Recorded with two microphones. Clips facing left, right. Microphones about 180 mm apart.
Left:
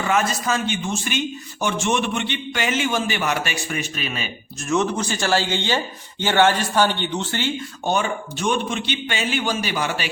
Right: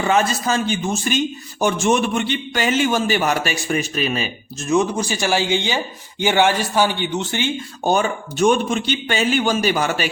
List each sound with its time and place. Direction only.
0.1 s a man's voice: 35° right (ahead or behind)
4.7 s a man's voice: 10° right (ahead or behind)
7.9 s a man's voice: 45° right (ahead or behind)